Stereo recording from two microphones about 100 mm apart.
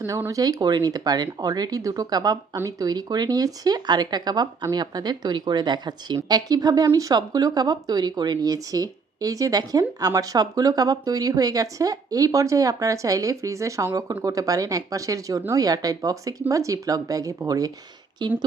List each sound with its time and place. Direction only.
0.3 s speech: 35° right (ahead or behind)
18.2 s speech: 50° right (ahead or behind)